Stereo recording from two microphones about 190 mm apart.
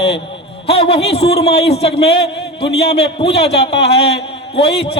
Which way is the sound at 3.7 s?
60° left (ahead or behind).